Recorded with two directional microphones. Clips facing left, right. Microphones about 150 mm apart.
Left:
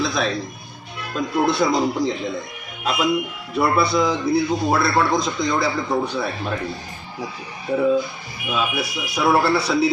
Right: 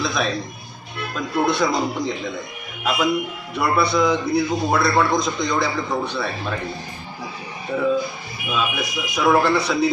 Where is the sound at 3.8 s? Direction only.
Centre (ahead or behind).